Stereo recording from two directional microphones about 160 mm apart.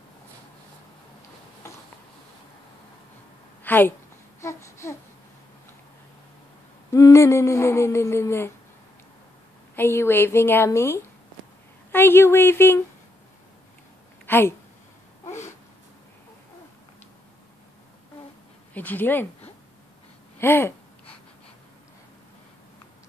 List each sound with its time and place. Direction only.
3.6 s a woman's voice: 10° left (ahead or behind)
4.4 s a sound: 15° left (ahead or behind)
6.9 s speech: 20° left (ahead or behind)
9.8 s speech: 15° left (ahead or behind)
14.2 s a woman's voice: 15° left (ahead or behind)
18.7 s speech: 10° left (ahead or behind)
20.3 s speech: 15° left (ahead or behind)